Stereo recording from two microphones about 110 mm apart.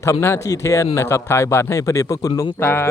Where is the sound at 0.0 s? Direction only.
25° left (ahead or behind).